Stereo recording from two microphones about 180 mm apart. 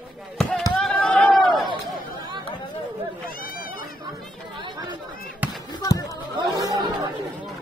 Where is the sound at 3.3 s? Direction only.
55° left (ahead or behind).